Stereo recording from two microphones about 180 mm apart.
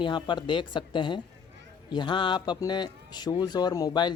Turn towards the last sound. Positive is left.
turn(degrees=25)  # may be behind; listen again after turning